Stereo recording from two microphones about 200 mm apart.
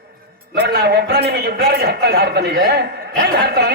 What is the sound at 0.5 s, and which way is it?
A man's voice, 50° right (ahead or behind).